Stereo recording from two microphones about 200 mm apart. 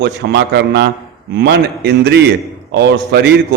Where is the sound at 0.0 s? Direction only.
60° right (ahead or behind).